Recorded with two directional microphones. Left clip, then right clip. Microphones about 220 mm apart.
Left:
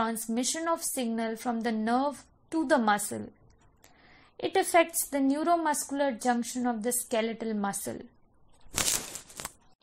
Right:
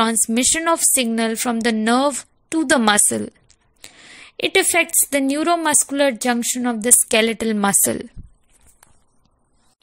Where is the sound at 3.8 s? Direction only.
55° right (ahead or behind).